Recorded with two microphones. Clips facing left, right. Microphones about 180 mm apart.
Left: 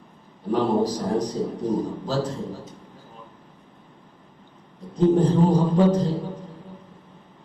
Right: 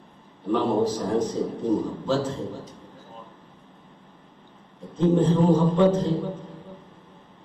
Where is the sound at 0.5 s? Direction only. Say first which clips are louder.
Left 1 dB; 35° left (ahead or behind).